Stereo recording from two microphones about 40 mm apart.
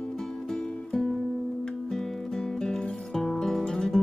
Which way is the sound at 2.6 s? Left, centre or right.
Centre.